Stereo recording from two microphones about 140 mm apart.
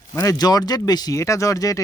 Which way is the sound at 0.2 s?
25° left (ahead or behind).